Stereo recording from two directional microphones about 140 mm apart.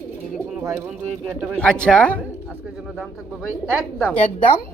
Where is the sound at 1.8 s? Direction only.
10° left (ahead or behind).